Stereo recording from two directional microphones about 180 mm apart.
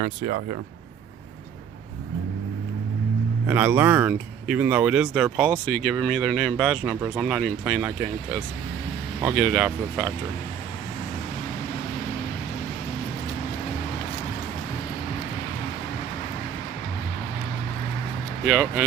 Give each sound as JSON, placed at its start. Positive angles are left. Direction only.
{"t": 0.0, "sound": "speech", "side_deg": -50}
{"t": 3.4, "sound": "speech", "side_deg": -10}
{"t": 9.2, "sound": "speech", "side_deg": 0}
{"t": 18.4, "sound": "speech", "side_deg": 5}